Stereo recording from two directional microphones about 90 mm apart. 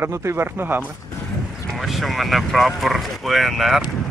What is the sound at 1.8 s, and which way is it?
Speech, centre (ahead or behind).